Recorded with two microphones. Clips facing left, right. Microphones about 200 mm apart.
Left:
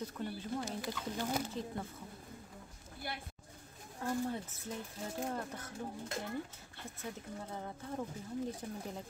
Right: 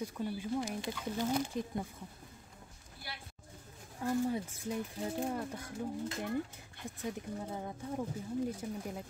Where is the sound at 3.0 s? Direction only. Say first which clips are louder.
Left 5 dB; 50° left (ahead or behind).